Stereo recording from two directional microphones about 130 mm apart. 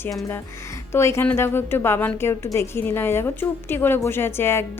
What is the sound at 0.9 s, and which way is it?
A woman's voice, 20° left (ahead or behind).